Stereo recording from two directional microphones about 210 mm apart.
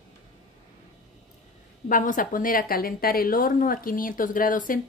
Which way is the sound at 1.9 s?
40° left (ahead or behind).